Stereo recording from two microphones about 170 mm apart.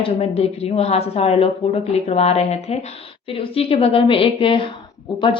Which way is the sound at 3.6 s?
35° left (ahead or behind).